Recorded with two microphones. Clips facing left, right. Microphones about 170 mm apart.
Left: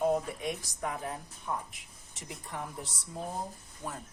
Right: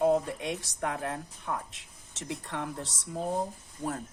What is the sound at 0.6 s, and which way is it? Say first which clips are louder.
Speech: right 3 dB; 80° right.